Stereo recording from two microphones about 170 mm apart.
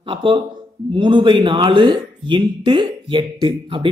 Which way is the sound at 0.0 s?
30° right (ahead or behind).